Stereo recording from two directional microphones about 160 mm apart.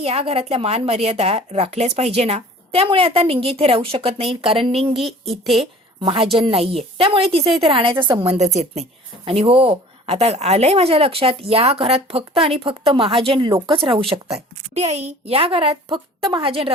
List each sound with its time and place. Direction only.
0.0 s a woman's voice: 40° right (ahead or behind)
4.9 s speech: centre (ahead or behind)
6.0 s a woman's voice: 30° right (ahead or behind)